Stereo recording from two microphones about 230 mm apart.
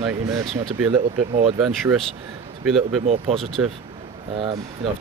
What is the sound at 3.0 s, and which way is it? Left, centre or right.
Speech, right.